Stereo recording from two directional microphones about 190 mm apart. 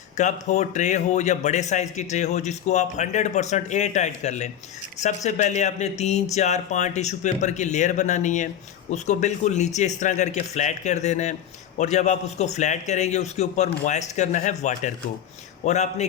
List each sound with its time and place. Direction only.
0.2 s a man's voice: 40° left (ahead or behind)